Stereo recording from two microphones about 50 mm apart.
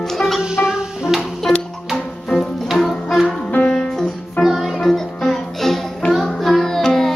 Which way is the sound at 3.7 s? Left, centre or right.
Centre.